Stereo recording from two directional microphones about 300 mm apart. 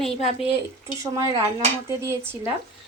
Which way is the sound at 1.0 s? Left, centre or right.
Centre.